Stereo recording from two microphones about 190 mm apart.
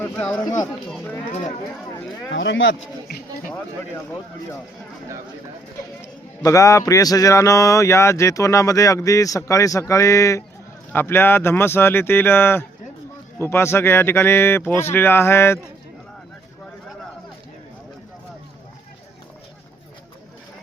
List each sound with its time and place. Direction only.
0.0 s a sound: 10° left (ahead or behind)
0.9 s speech: 5° left (ahead or behind)
2.3 s speech: 75° left (ahead or behind)
6.4 s speech: 15° left (ahead or behind)